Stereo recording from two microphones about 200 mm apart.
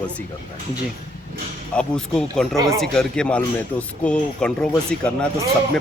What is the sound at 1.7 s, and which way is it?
Speech, 5° left (ahead or behind).